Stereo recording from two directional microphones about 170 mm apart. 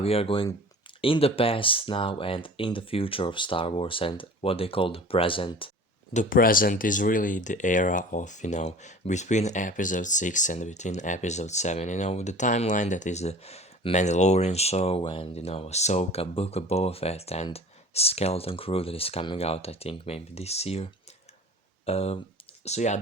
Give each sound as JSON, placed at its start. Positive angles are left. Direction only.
{"t": 0.0, "sound": "speech", "side_deg": 35}
{"t": 6.1, "sound": "speech", "side_deg": 55}